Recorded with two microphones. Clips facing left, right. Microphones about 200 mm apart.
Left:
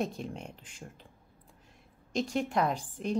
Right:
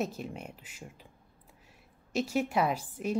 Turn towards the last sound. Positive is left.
turn(degrees=-5)  # may be behind; listen again after turning